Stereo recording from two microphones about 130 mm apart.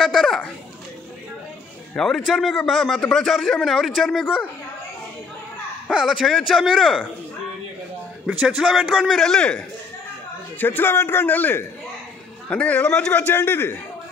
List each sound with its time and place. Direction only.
0.0 s a sound: centre (ahead or behind)
2.0 s a man's voice: centre (ahead or behind)
5.9 s a man's voice: 5° right (ahead or behind)
8.5 s a man's voice: 5° right (ahead or behind)
10.6 s a man's voice: 15° left (ahead or behind)